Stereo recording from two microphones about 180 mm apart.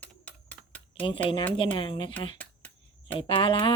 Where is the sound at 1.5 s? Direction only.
30° left (ahead or behind).